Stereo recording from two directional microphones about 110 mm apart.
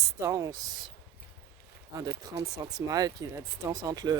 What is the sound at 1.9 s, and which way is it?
Speech, 35° right (ahead or behind).